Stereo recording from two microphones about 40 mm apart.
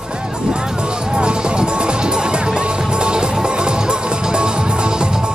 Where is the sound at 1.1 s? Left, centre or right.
Right.